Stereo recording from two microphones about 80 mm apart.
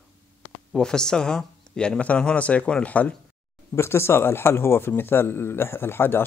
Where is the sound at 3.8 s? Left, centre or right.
Left.